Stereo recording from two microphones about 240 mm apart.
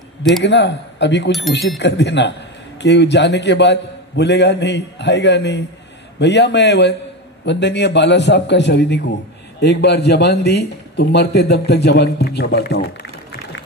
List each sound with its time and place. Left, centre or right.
0.4 s a man's voice: left
12.8 s music: left